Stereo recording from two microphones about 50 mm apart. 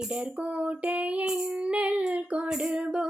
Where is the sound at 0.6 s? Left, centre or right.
Right.